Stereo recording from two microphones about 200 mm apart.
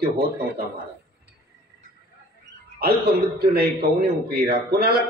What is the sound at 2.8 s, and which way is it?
A man's voice, 50° right (ahead or behind).